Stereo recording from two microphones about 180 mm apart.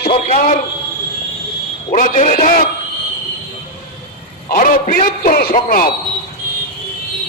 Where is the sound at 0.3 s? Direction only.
45° left (ahead or behind).